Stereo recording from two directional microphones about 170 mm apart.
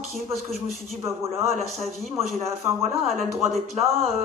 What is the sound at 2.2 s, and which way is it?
Speech, 40° right (ahead or behind).